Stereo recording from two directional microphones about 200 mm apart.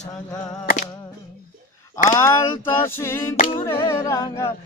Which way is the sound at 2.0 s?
15° left (ahead or behind).